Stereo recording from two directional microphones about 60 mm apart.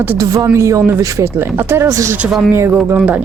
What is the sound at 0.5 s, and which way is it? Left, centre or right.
Speech, right.